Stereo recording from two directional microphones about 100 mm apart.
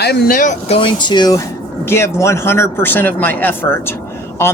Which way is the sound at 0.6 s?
90° left.